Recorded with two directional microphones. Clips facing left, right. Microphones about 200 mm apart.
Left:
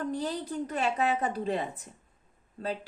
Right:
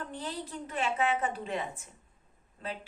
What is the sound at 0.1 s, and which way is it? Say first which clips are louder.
A woman's voice: left 6 dB; 40° left (ahead or behind).